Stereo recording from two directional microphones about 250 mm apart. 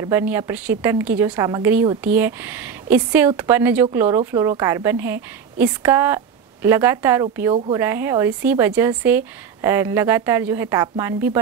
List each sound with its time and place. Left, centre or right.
0.0 s a woman's voice: centre